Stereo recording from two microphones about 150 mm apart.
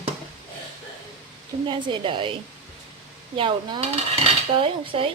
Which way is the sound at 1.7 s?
35° right (ahead or behind).